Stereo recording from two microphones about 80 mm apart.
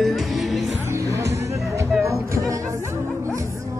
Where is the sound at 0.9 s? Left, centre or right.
Right.